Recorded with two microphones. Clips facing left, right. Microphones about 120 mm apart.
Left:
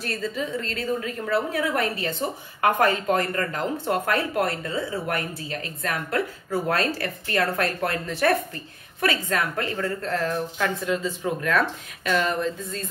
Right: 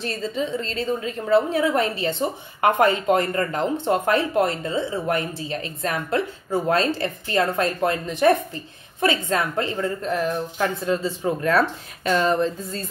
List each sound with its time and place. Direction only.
0.0 s a woman's voice: 25° right (ahead or behind)